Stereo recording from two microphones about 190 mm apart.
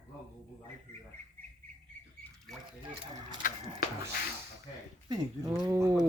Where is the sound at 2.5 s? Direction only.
Centre (ahead or behind).